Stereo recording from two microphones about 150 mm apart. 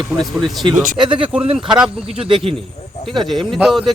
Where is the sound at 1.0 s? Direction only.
35° right (ahead or behind).